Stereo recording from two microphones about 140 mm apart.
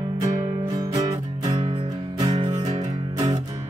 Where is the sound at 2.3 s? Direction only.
50° right (ahead or behind).